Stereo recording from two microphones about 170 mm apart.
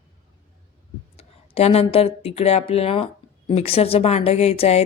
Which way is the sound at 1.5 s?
35° left (ahead or behind).